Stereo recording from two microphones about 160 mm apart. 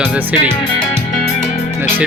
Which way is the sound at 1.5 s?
45° left (ahead or behind).